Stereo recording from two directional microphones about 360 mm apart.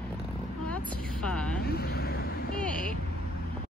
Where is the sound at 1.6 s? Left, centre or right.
Left.